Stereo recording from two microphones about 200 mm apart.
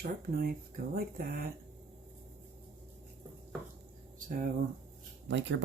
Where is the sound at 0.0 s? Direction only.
45° right (ahead or behind).